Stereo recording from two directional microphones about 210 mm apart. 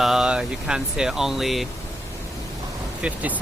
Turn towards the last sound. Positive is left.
turn(degrees=-5)  # may be behind; listen again after turning